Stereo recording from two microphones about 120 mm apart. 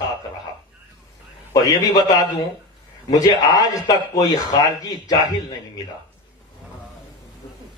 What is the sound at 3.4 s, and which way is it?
Speech, 30° left (ahead or behind).